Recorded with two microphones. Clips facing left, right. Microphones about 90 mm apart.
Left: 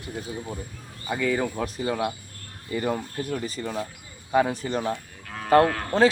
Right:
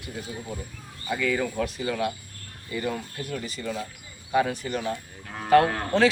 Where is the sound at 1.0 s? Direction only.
25° left (ahead or behind).